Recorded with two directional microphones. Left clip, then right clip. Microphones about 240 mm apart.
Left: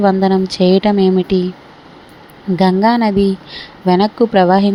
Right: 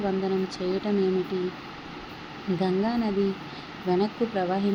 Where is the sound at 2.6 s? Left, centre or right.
Left.